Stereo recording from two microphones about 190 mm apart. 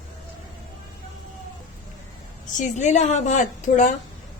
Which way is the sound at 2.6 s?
40° left (ahead or behind).